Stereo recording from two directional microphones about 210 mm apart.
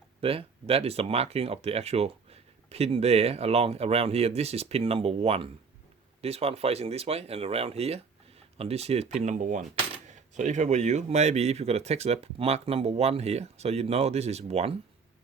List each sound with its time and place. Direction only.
0.2 s speech: 25° right (ahead or behind)